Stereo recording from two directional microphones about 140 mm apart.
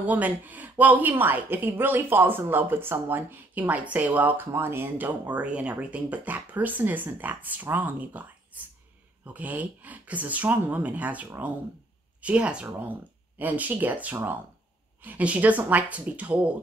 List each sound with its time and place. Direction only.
0.0 s a woman's voice: 10° right (ahead or behind)